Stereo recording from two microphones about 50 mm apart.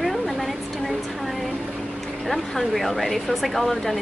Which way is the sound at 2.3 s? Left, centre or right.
Centre.